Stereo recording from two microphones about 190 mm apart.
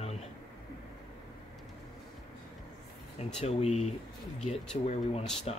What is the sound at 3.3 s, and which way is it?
Speech, 35° left (ahead or behind).